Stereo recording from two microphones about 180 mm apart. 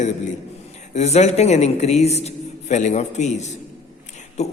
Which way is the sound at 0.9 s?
35° left (ahead or behind).